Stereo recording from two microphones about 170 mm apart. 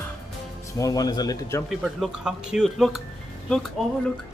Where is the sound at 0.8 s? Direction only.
20° left (ahead or behind).